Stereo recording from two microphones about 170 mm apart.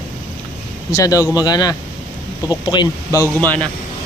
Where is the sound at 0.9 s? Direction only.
20° left (ahead or behind).